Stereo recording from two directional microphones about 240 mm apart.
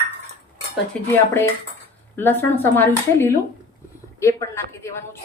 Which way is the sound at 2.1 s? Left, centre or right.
Centre.